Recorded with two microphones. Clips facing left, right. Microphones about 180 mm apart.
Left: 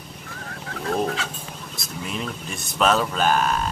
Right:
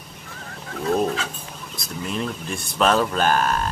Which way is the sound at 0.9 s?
20° right (ahead or behind).